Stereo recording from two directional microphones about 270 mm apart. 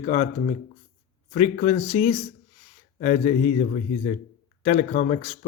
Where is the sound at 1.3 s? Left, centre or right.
Left.